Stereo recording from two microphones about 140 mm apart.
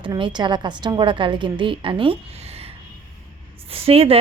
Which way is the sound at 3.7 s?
45° right (ahead or behind).